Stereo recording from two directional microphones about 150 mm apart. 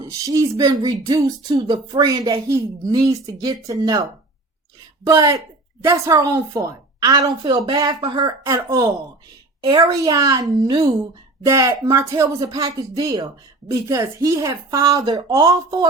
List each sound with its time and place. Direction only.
0.0 s a woman's voice: 20° right (ahead or behind)
5.0 s a woman's voice: 20° right (ahead or behind)